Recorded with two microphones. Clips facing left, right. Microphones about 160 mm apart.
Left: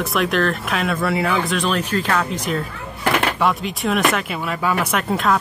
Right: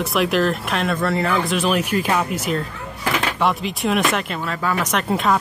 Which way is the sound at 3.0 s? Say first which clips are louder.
Left 3 dB; 60° left (ahead or behind).